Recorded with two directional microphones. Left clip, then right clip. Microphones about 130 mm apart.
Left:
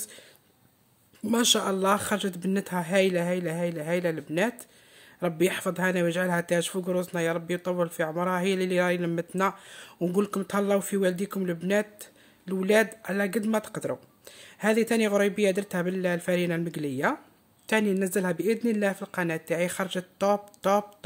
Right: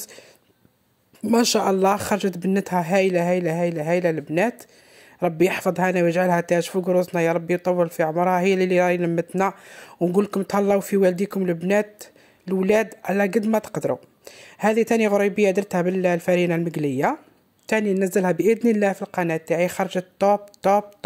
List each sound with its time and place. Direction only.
1.2 s speech: 30° right (ahead or behind)